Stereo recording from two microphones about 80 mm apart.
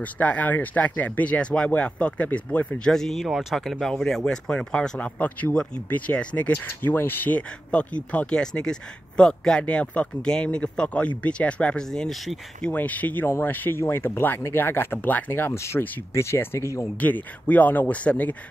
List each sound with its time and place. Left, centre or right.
0.0 s speech: centre
12.6 s speech: centre; by 16.8 s left
17.0 s speech: centre